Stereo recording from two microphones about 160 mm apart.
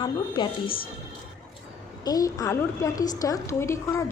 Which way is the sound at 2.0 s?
20° left (ahead or behind).